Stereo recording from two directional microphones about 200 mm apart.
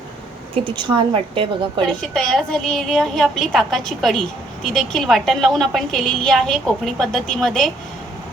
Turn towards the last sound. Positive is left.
turn(degrees=0)  # may be behind; listen again after turning